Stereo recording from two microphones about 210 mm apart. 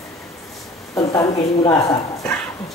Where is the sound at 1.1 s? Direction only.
15° left (ahead or behind).